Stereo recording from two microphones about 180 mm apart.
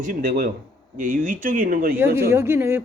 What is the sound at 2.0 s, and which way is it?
Speech, 15° right (ahead or behind).